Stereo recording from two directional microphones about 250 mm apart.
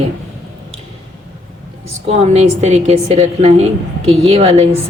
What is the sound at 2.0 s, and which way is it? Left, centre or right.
Speech, right.